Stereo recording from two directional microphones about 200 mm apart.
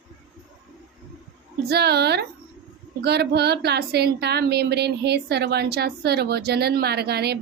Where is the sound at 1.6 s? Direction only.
55° right (ahead or behind).